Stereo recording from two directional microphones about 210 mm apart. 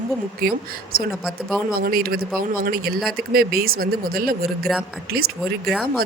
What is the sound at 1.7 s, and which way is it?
A woman's voice, 45° right (ahead or behind).